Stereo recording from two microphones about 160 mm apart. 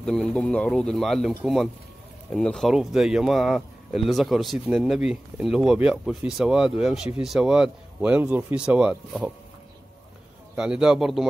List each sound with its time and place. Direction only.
0.0 s speech: 5° left (ahead or behind)
10.5 s speech: 5° right (ahead or behind)